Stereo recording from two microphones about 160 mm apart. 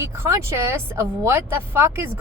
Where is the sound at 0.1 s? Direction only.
15° right (ahead or behind).